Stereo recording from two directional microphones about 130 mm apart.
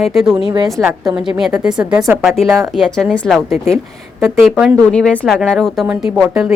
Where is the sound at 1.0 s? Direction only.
5° right (ahead or behind).